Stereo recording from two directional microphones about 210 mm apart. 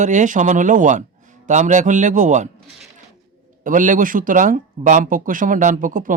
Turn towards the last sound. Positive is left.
turn(degrees=-40)  # may be behind; listen again after turning